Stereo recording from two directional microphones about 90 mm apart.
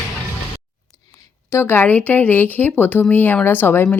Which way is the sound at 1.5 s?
25° left (ahead or behind).